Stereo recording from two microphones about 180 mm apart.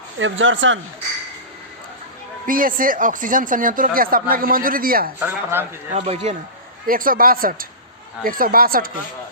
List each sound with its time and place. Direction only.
0.2 s speech: 90° right
2.5 s speech: 50° right (ahead or behind)
5.2 s speech: 10° right (ahead or behind)
5.9 s speech: 40° right (ahead or behind)
6.8 s speech: 50° right (ahead or behind)